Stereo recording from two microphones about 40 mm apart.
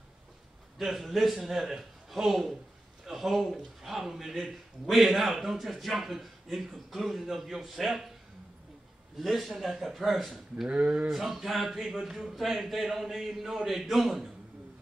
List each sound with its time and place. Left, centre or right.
0.7 s speech: centre
9.2 s speech: centre
10.7 s speech: right
11.1 s speech: centre